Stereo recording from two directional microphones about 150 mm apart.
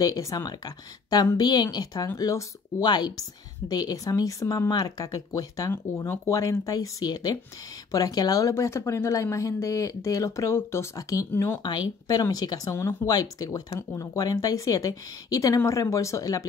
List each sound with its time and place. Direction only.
0.0 s a woman's voice: 25° left (ahead or behind)